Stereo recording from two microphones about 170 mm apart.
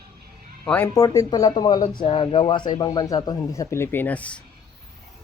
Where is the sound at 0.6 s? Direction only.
10° left (ahead or behind).